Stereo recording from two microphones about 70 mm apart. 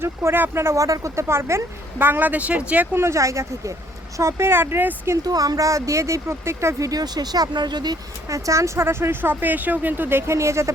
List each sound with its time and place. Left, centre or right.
0.0 s speech: right; by 2.8 s centre
2.9 s speech: right
5.1 s speech: right
8.3 s speech: right